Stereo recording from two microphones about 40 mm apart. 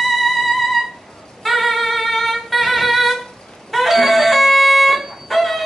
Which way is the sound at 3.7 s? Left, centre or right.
Centre.